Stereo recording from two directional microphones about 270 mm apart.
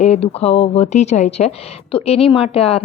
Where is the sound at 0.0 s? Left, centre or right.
Left.